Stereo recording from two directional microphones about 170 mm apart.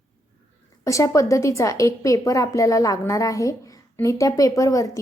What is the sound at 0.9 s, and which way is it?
A woman's voice, 20° left (ahead or behind).